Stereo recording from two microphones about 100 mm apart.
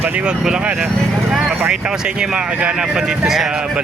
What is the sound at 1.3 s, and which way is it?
Vehicle, 5° right (ahead or behind).